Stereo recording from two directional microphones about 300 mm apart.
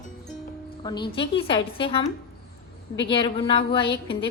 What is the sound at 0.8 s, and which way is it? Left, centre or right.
A woman's voice, centre.